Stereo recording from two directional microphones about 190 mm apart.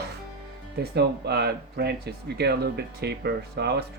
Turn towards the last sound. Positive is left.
turn(degrees=-60)  # may be behind; listen again after turning